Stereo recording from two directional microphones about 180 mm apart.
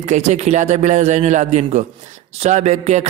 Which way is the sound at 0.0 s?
40° right (ahead or behind).